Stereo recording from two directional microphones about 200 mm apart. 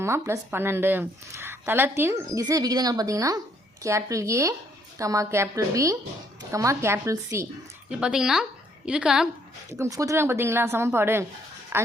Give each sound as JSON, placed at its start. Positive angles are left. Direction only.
{"t": 0.0, "sound": "a woman's voice", "side_deg": -15}
{"t": 9.7, "sound": "a woman's voice", "side_deg": -15}